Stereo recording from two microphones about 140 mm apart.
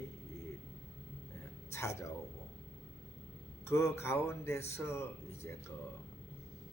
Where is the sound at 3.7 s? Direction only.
20° left (ahead or behind).